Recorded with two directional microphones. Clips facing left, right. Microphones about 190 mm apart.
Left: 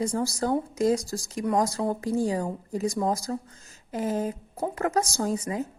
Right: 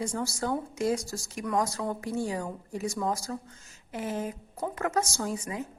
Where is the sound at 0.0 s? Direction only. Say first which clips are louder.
Left 5 dB; 35° left (ahead or behind).